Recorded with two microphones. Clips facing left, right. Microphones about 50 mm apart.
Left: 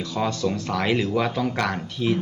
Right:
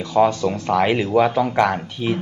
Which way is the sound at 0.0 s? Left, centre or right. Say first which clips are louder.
Right 8 dB; right.